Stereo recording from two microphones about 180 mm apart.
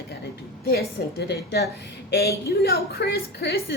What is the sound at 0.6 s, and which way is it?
A woman's voice, 65° left (ahead or behind).